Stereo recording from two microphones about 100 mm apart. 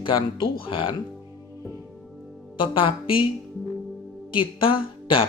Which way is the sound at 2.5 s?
60° left (ahead or behind).